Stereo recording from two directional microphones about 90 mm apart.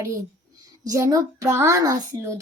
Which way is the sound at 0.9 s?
40° right (ahead or behind).